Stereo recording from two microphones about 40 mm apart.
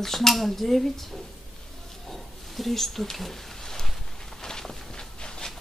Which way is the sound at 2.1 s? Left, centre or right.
Centre.